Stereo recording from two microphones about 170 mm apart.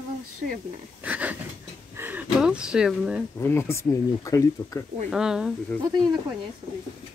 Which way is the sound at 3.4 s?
15° left (ahead or behind).